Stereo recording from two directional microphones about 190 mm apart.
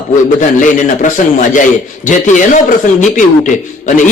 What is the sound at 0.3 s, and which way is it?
A man's voice, 40° left (ahead or behind).